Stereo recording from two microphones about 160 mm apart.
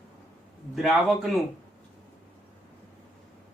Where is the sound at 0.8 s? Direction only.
Centre (ahead or behind).